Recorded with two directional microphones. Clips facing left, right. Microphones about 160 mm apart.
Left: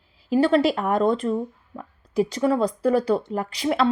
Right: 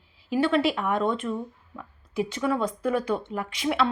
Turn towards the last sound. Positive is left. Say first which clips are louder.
# left 3 dB
turn(degrees=35)  # may be behind; listen again after turning